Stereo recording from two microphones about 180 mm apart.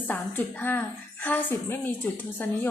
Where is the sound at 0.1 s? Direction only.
10° left (ahead or behind).